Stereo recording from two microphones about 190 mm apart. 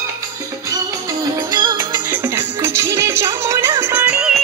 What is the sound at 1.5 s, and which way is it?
Music, 20° right (ahead or behind).